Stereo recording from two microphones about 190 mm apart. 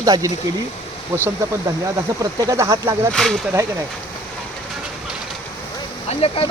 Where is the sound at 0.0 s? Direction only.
20° right (ahead or behind).